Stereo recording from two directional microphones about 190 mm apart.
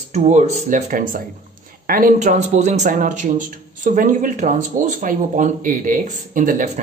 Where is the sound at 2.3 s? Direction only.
35° right (ahead or behind).